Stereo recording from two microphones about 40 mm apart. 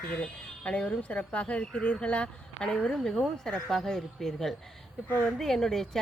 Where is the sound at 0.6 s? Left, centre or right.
Left.